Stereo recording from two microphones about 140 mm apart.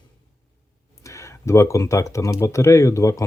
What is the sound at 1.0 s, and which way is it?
Speech, 20° left (ahead or behind).